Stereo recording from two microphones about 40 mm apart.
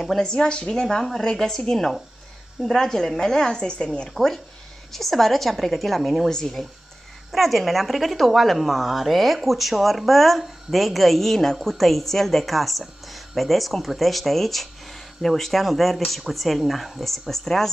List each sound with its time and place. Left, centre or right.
0.2 s speech: centre
0.7 s a woman's voice: centre; by 4.1 s left
4.1 s a woman's voice: centre
7.3 s a woman's voice: centre